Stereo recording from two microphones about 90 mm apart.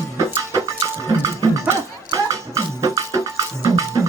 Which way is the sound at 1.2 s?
50° right (ahead or behind).